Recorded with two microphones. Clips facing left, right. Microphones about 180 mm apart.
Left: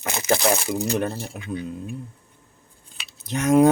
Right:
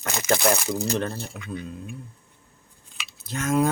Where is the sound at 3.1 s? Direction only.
20° left (ahead or behind).